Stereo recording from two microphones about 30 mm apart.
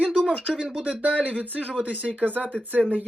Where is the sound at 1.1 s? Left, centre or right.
Right.